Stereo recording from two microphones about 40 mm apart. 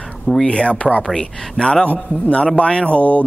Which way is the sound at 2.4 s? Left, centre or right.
Left.